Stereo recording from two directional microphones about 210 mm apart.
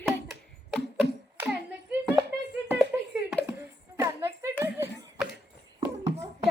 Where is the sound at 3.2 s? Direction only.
5° right (ahead or behind).